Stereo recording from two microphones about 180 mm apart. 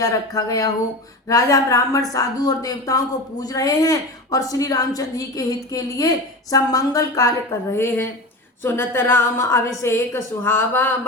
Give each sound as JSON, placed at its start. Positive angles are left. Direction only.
{"t": 0.0, "sound": "a woman's voice", "side_deg": 20}